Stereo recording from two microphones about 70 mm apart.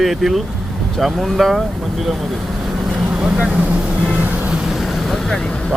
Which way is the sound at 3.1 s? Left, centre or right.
Centre.